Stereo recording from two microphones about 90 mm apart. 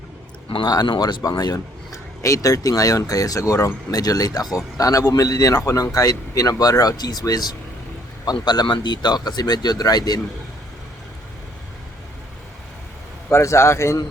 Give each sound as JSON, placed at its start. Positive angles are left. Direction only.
{"t": 0.6, "sound": "speech", "side_deg": 55}
{"t": 1.5, "sound": "speech", "side_deg": 35}
{"t": 13.3, "sound": "speech", "side_deg": 30}